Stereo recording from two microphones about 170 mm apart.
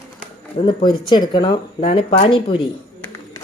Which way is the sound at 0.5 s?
30° left (ahead or behind).